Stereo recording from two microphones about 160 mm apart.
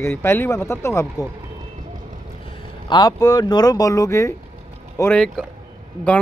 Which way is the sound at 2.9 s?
25° left (ahead or behind).